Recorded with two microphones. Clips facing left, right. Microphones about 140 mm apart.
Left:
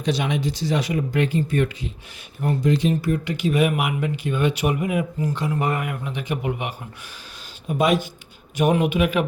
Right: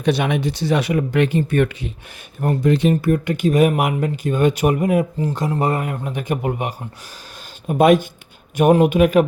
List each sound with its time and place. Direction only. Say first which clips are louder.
0.0 s speech: right 4 dB; 60° right (ahead or behind); by 9.2 s 45° right (ahead or behind)